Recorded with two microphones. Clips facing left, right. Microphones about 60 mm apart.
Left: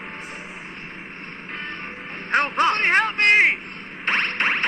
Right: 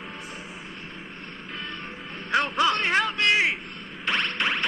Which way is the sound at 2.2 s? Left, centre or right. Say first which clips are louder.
Left 3 dB; left.